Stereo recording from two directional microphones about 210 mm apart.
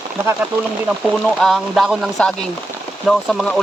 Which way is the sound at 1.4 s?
Centre (ahead or behind).